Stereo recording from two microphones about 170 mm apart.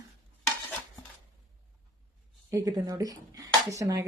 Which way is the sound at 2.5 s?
20° right (ahead or behind).